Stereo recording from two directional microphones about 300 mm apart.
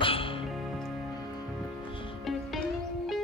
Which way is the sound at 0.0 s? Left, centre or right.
Centre.